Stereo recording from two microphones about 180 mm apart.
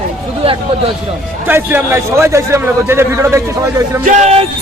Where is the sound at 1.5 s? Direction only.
10° right (ahead or behind).